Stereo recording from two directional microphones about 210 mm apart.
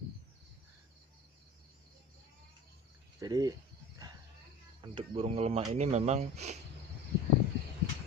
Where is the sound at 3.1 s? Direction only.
15° right (ahead or behind).